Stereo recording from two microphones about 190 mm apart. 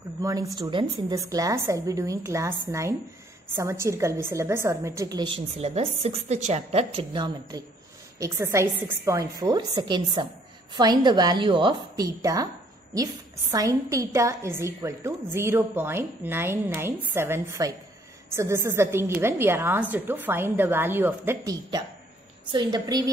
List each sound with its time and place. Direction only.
0.2 s a woman's voice: 15° right (ahead or behind)
22.5 s a woman's voice: 25° right (ahead or behind)